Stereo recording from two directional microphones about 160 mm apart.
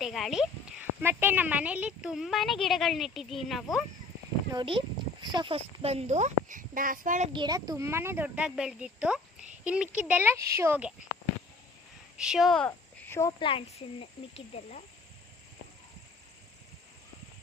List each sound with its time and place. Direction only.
0.0 s speech: centre (ahead or behind)
1.0 s speech: 10° right (ahead or behind)
4.5 s speech: 35° right (ahead or behind); by 7.3 s 55° right (ahead or behind)
7.3 s a child's voice: 25° right (ahead or behind); by 10.9 s 10° right (ahead or behind)
12.1 s speech: 5° right (ahead or behind); by 13.3 s 15° left (ahead or behind)
13.4 s speech: 35° left (ahead or behind)
14.5 s speech: 45° left (ahead or behind)